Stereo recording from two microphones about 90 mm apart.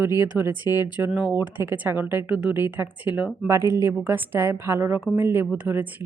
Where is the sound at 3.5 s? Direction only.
35° right (ahead or behind); by 5.9 s 15° right (ahead or behind).